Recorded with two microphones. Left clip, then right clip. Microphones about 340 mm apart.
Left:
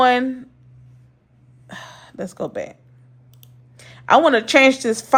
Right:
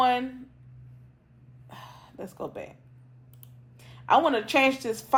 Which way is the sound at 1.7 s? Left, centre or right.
Left.